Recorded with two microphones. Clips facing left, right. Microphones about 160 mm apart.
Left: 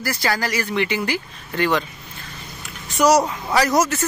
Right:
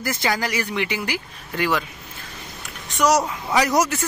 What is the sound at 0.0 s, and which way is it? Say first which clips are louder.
Speech: left 1 dB; 20° right (ahead or behind).